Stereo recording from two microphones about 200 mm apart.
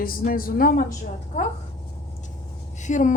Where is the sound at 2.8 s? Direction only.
40° left (ahead or behind).